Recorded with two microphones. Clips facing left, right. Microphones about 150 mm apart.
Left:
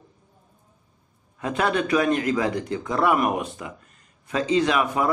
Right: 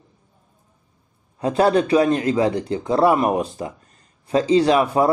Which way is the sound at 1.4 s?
35° right (ahead or behind).